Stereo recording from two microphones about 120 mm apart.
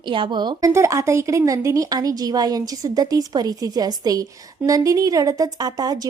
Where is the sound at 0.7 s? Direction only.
25° right (ahead or behind).